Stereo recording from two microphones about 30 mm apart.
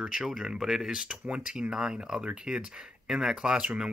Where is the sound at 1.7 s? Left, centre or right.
Right.